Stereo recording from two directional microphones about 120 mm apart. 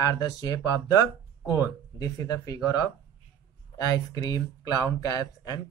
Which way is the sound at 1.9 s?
30° left (ahead or behind).